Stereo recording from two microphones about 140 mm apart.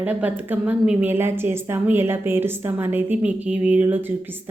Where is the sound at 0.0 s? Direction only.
10° right (ahead or behind).